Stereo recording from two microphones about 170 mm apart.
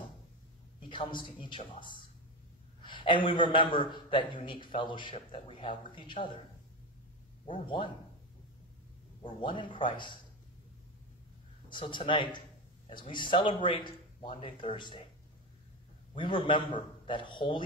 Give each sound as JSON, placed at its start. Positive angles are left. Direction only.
{"t": 0.8, "sound": "a man's voice", "side_deg": 30}
{"t": 2.8, "sound": "a sound", "side_deg": 30}
{"t": 3.3, "sound": "a man's voice", "side_deg": 30}
{"t": 7.4, "sound": "a man's voice", "side_deg": 30}
{"t": 9.2, "sound": "a man's voice", "side_deg": 30}
{"t": 11.7, "sound": "a man's voice", "side_deg": 30}
{"t": 16.3, "sound": "a man's voice", "side_deg": 30}